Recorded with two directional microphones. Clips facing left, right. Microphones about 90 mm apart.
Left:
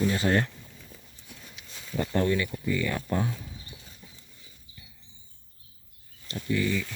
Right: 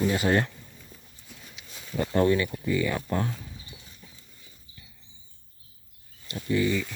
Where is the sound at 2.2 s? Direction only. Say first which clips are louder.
Right 5 dB; 20° right (ahead or behind).